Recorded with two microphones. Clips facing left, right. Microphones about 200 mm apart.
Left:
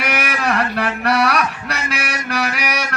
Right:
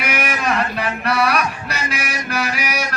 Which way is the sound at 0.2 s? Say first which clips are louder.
Right 1 dB; 65° left (ahead or behind).